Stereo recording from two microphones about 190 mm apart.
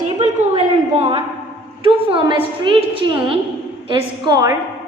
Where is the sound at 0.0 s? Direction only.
35° right (ahead or behind).